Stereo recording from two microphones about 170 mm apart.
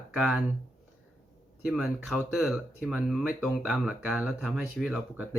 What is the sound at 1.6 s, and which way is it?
Speech, centre (ahead or behind).